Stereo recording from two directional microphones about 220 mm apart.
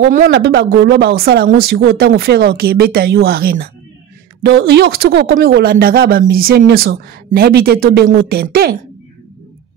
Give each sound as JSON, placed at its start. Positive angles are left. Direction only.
{"t": 0.1, "sound": "speech", "side_deg": -40}